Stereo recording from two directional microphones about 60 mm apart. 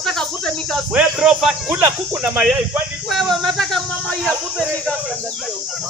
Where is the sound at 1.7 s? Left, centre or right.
Right.